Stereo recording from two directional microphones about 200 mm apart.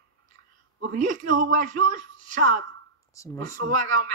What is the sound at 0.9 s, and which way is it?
A man's voice, 40° right (ahead or behind).